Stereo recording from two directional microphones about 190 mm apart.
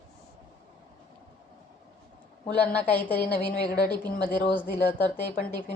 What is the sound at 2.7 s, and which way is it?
Speech, 10° left (ahead or behind).